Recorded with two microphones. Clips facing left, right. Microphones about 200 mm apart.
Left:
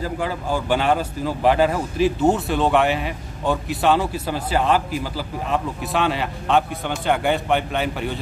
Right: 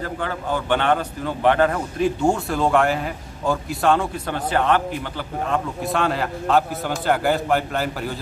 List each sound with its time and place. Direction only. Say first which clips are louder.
0.0 s a man's voice: left 2 dB; 10° left (ahead or behind)